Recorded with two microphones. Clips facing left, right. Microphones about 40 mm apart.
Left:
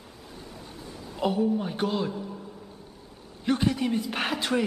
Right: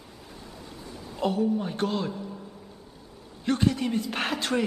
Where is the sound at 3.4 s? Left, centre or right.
Centre.